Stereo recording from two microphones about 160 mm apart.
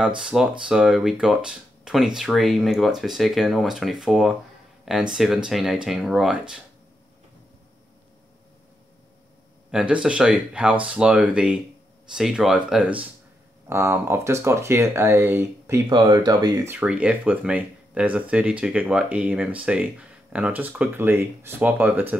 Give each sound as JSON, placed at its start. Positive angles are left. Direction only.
{"t": 0.0, "sound": "speech", "side_deg": -5}
{"t": 9.7, "sound": "speech", "side_deg": -5}
{"t": 13.7, "sound": "speech", "side_deg": -15}
{"t": 16.7, "sound": "speech", "side_deg": -5}